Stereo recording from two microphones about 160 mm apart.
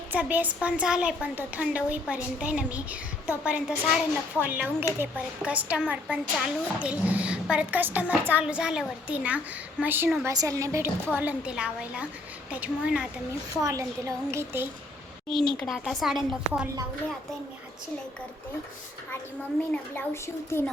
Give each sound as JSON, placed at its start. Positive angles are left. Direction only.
{"t": 0.1, "sound": "a woman's voice", "side_deg": -10}
{"t": 13.6, "sound": "a woman's voice", "side_deg": -20}
{"t": 15.3, "sound": "a woman's voice", "side_deg": 5}
{"t": 19.9, "sound": "a woman's voice", "side_deg": 15}